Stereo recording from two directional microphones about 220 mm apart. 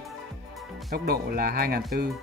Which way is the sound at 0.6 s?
Centre (ahead or behind).